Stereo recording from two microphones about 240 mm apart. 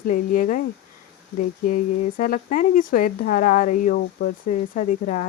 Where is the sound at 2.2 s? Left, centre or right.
Left.